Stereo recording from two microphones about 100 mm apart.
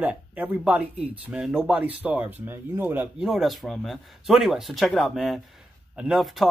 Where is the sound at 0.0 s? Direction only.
15° right (ahead or behind).